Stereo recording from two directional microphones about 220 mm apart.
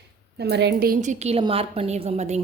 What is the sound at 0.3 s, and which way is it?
A woman's voice, 50° right (ahead or behind).